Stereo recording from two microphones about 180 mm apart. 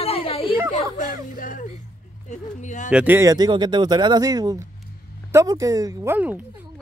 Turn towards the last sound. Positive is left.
turn(degrees=-10)  # may be behind; listen again after turning